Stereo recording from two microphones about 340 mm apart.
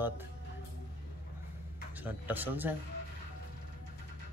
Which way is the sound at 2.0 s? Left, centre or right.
Centre.